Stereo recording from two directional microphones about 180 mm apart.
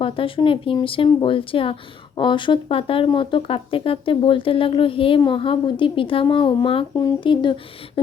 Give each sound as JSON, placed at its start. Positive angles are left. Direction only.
{"t": 0.0, "sound": "speech", "side_deg": 30}